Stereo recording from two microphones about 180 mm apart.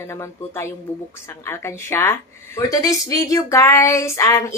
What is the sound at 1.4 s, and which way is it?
A woman's voice, 15° left (ahead or behind).